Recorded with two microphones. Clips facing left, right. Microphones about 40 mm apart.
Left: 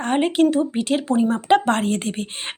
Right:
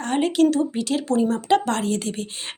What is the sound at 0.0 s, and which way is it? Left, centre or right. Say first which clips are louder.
A woman's voice: left 1 dB; left.